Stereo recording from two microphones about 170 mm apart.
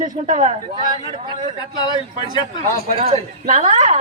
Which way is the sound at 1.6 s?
25° left (ahead or behind).